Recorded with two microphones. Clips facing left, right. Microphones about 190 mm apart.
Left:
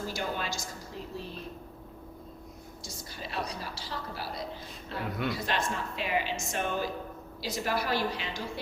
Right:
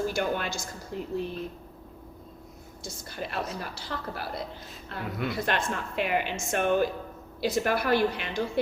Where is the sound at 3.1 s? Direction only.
55° right (ahead or behind).